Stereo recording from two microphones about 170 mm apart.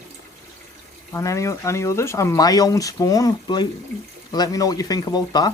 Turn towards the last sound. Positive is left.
turn(degrees=25)  # may be behind; listen again after turning